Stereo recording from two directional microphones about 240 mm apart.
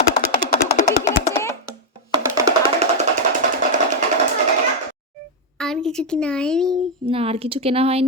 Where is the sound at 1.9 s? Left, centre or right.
Centre.